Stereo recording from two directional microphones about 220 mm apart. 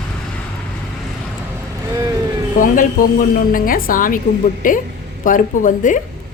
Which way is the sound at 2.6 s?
40° left (ahead or behind).